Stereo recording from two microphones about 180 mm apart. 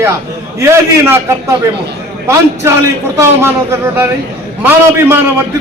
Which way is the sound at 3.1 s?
15° right (ahead or behind).